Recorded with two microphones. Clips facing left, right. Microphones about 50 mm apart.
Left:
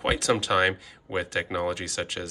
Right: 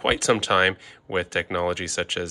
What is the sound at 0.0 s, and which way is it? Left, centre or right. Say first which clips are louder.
Speech: right 3 dB; right.